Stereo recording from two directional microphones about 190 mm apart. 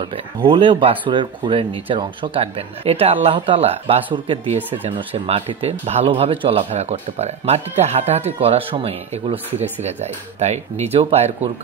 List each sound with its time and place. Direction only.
0.5 s a man's voice: 25° right (ahead or behind)